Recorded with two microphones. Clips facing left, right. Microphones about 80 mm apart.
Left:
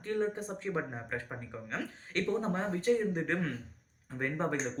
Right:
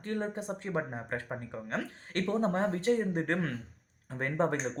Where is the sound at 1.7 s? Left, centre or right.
Right.